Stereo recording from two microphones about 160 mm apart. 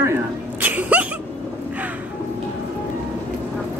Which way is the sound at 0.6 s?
10° right (ahead or behind).